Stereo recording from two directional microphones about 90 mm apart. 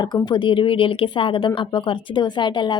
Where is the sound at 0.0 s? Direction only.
55° left (ahead or behind).